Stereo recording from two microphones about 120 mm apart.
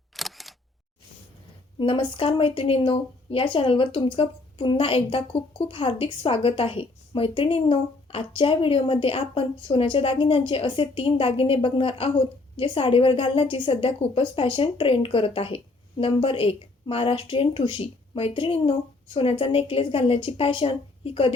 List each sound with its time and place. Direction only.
0.2 s single-lens reflex camera: centre (ahead or behind)
1.8 s speech: 45° left (ahead or behind)